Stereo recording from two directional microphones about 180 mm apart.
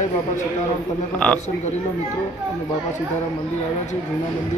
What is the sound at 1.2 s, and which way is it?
Speech, 5° left (ahead or behind).